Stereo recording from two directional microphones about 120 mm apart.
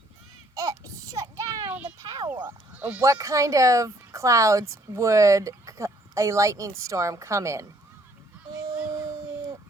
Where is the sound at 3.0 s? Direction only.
25° right (ahead or behind).